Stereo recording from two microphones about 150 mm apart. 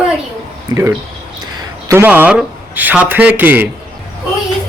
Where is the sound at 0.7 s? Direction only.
20° right (ahead or behind).